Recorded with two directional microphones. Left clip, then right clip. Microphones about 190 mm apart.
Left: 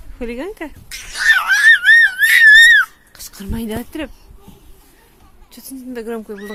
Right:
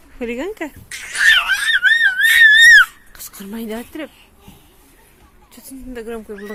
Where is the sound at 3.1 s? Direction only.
15° left (ahead or behind).